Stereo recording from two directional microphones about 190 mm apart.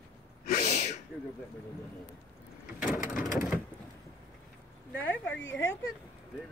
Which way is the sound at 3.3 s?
45° left (ahead or behind).